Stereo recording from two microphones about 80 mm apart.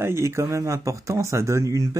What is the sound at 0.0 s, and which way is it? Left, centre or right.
Speech, right.